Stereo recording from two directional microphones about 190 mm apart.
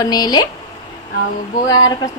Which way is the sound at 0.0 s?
20° left (ahead or behind).